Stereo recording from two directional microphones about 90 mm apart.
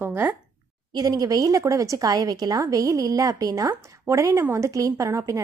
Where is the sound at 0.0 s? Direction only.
20° right (ahead or behind).